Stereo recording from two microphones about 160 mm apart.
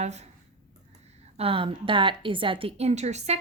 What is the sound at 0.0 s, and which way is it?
Speech, 45° right (ahead or behind).